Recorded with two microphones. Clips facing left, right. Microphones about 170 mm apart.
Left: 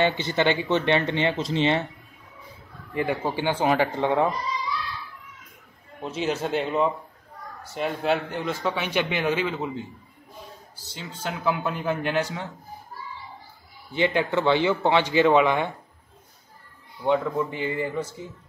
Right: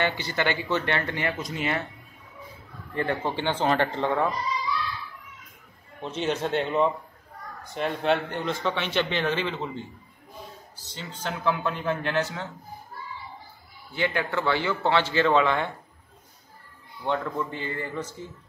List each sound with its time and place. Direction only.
0.0 s speech: 20° left (ahead or behind)
2.9 s a man's voice: 10° left (ahead or behind)
5.9 s a man's voice: 5° left (ahead or behind)
13.9 s a man's voice: 20° left (ahead or behind)
17.0 s a man's voice: 10° left (ahead or behind)